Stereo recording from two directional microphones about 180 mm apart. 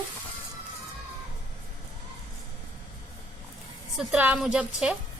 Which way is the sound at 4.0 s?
5° right (ahead or behind).